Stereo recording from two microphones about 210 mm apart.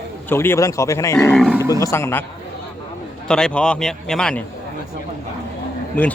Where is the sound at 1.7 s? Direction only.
15° left (ahead or behind).